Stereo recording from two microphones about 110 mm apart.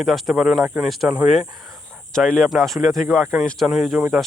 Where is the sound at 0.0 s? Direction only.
Centre (ahead or behind).